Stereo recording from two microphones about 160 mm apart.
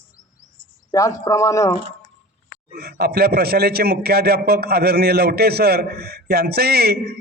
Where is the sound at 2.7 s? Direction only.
80° right.